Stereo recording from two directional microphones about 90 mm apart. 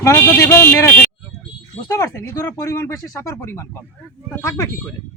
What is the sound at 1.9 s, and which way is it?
Speech, 35° left (ahead or behind).